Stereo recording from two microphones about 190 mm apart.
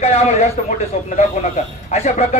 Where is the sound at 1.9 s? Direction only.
35° left (ahead or behind).